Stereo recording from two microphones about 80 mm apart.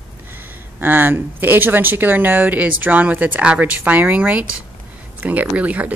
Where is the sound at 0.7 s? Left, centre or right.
Right.